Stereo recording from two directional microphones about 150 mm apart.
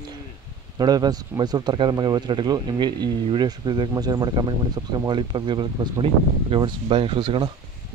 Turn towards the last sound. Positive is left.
turn(degrees=-30)  # may be behind; listen again after turning